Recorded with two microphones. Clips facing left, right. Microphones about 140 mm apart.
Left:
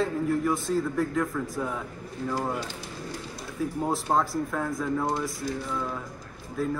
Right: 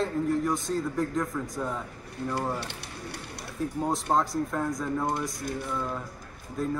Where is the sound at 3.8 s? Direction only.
5° left (ahead or behind).